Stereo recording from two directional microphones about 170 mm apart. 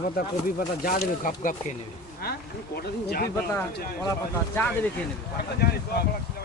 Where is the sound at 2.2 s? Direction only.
65° left (ahead or behind).